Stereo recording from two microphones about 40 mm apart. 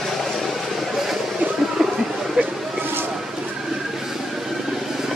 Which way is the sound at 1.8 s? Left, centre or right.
Centre.